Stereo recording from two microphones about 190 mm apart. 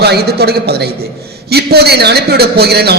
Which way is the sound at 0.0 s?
60° right (ahead or behind).